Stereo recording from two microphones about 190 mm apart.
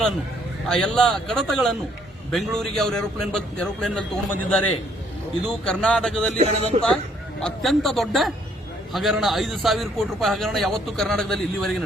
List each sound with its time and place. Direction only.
0.7 s a man's voice: 5° left (ahead or behind)
5.5 s a man's voice: 5° left (ahead or behind)
6.4 s a man's voice: 30° right (ahead or behind)
7.4 s a man's voice: centre (ahead or behind)